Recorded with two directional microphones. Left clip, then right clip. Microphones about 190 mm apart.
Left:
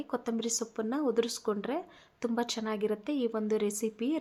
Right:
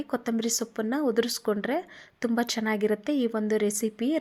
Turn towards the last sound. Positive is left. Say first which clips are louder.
# right 5 dB
turn(degrees=-25)  # may be behind; listen again after turning